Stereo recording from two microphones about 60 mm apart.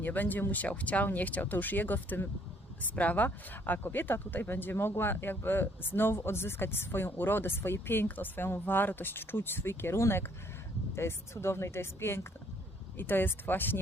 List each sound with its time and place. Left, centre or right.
0.0 s speech: left